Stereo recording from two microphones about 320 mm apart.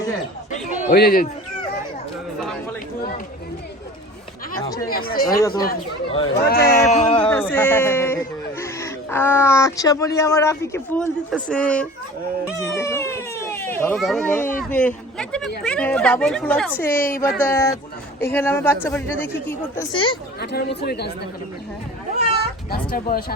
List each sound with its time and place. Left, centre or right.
0.5 s a man's voice: left
5.4 s speech: centre
6.4 s a man's voice: left
7.3 s speech: centre
17.1 s a man's voice: left
17.4 s speech: centre
20.4 s speech: left
22.9 s a man's voice: left